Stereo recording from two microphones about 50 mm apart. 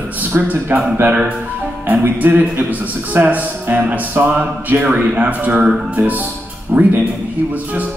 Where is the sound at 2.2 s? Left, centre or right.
Right.